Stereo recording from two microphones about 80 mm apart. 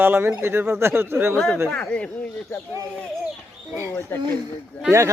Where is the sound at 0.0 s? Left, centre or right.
Right.